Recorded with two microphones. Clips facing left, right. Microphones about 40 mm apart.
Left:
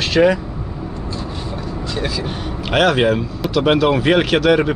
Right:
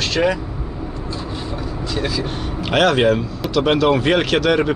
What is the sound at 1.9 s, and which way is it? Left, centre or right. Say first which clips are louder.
Speech: right 1 dB; centre.